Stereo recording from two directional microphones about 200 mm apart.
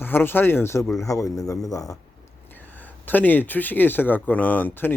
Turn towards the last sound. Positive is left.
turn(degrees=10)  # may be behind; listen again after turning